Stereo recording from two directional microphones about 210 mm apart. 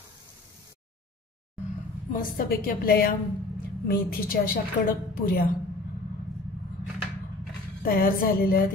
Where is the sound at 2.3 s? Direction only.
45° left (ahead or behind).